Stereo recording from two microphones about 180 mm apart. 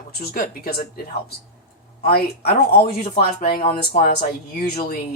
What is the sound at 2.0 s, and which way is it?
Speech, 60° left (ahead or behind).